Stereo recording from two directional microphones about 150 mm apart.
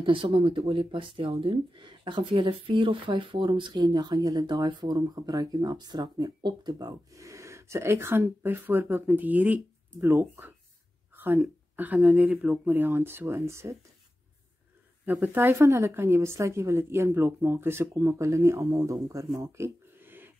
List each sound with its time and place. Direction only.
0.0 s speech: 35° right (ahead or behind); by 12.4 s centre (ahead or behind)
12.6 s speech: 15° right (ahead or behind)
15.0 s speech: 15° right (ahead or behind)
19.4 s a sound: 20° right (ahead or behind)